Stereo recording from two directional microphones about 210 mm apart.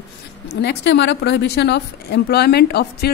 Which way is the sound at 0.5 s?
55° left (ahead or behind).